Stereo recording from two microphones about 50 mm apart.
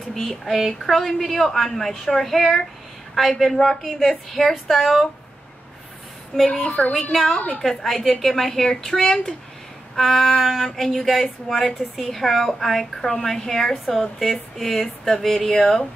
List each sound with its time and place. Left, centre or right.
0.1 s a woman's voice: centre
6.3 s speech: centre
7.3 s a woman's voice: left
7.8 s a woman's voice: centre